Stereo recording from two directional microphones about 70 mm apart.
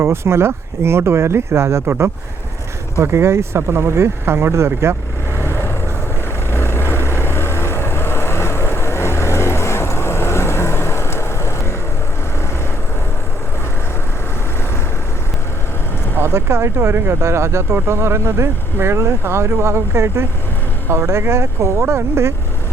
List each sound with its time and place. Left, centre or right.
0.0 s speech: right
5.4 s vehicle: left
16.1 s speech: right